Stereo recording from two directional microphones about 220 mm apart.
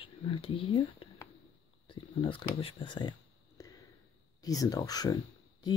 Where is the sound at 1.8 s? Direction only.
25° left (ahead or behind).